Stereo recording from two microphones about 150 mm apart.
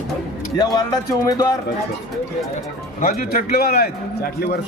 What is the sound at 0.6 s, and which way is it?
Speech, 25° left (ahead or behind).